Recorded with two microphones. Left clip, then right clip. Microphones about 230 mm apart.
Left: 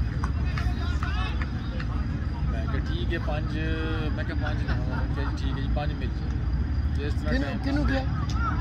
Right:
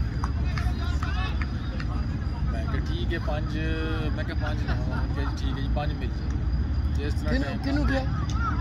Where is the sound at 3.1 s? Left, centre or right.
Right.